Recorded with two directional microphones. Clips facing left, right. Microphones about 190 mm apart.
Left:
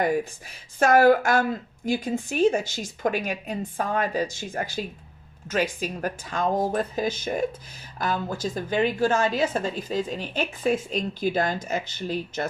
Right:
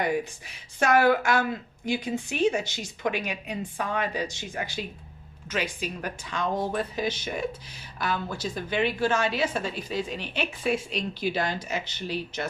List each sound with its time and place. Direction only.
0.0 s a woman's voice: 45° left (ahead or behind)